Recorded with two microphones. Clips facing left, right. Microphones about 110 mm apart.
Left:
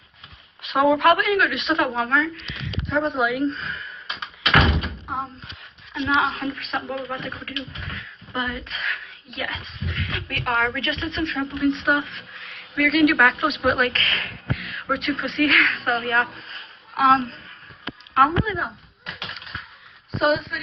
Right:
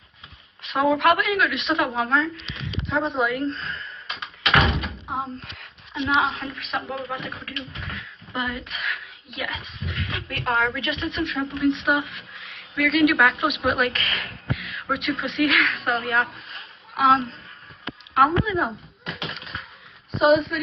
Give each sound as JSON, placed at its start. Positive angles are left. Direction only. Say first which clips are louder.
{"t": 0.6, "sound": "a woman's voice", "louder": "left 2 dB", "side_deg": 5}
{"t": 2.0, "sound": "speech", "louder": "even", "side_deg": -25}
{"t": 2.9, "sound": "speech", "louder": "left 1 dB", "side_deg": 0}
{"t": 4.6, "sound": "door", "louder": "left 2 dB", "side_deg": 0}
{"t": 6.0, "sound": "a woman's voice", "louder": "left 1 dB", "side_deg": 0}
{"t": 10.2, "sound": "a woman's voice", "louder": "even", "side_deg": -15}
{"t": 11.0, "sound": "a woman's voice", "louder": "even", "side_deg": -5}
{"t": 12.0, "sound": "speech", "louder": "even", "side_deg": -15}
{"t": 12.7, "sound": "a woman's voice", "louder": "left 1 dB", "side_deg": 0}
{"t": 19.0, "sound": "a sound", "louder": "right 3 dB", "side_deg": 0}
{"t": 20.2, "sound": "a woman's voice", "louder": "right 3 dB", "side_deg": 0}